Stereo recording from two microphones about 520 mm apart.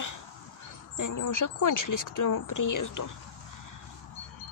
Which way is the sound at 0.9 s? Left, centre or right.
Left.